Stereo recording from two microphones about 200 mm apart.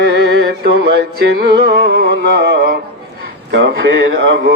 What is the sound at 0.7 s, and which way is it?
Music, 55° right (ahead or behind).